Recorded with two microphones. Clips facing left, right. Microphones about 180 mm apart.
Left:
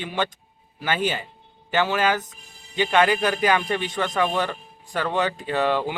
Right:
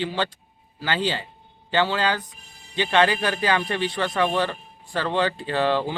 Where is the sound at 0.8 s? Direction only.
20° left (ahead or behind).